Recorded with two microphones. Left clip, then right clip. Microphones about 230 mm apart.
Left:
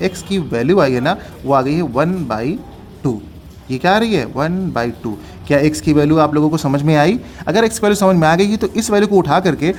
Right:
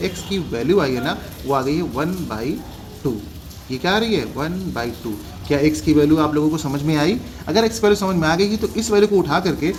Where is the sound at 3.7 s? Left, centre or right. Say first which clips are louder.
Left 5 dB; left.